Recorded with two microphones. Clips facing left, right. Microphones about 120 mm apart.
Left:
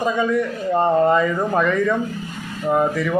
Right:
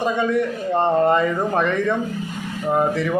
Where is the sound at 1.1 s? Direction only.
25° right (ahead or behind).